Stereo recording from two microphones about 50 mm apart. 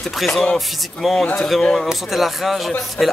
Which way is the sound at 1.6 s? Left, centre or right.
Centre.